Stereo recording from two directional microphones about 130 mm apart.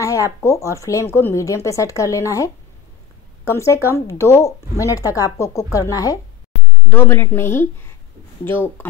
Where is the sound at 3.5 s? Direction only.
20° left (ahead or behind).